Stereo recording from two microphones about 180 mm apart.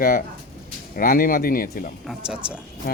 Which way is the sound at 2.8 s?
55° left (ahead or behind).